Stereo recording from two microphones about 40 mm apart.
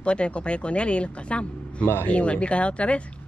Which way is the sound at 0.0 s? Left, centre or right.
Left.